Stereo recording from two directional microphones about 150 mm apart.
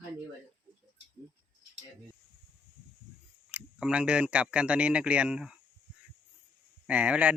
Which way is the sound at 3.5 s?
5° right (ahead or behind).